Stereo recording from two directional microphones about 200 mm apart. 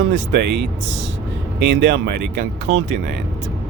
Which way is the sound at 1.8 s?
55° right (ahead or behind).